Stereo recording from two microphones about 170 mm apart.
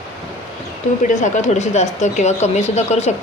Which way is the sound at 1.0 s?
45° left (ahead or behind).